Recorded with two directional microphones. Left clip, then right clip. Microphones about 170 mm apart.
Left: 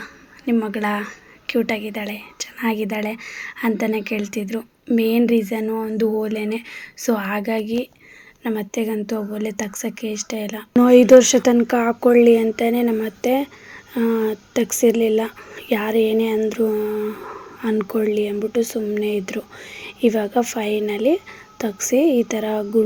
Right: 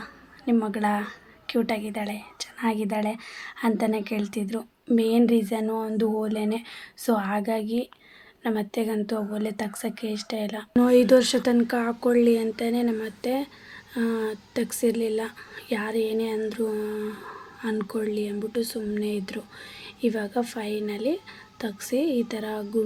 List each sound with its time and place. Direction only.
0.0 s a woman's voice: 15° left (ahead or behind)